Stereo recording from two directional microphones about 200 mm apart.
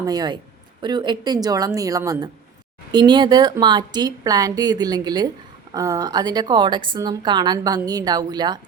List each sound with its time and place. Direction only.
0.0 s a woman's voice: 20° right (ahead or behind)